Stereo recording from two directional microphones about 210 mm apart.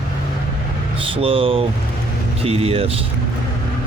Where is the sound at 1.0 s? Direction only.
25° right (ahead or behind).